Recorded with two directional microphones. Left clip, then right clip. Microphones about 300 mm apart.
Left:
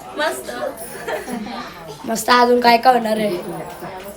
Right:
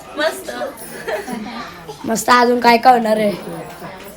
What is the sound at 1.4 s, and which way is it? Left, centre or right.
A woman's voice, centre.